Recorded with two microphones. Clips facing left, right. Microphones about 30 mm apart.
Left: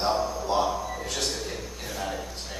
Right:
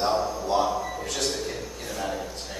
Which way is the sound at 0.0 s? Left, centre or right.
Centre.